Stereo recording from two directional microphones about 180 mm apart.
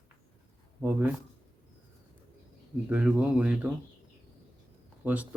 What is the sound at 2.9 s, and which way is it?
Speech, 10° right (ahead or behind).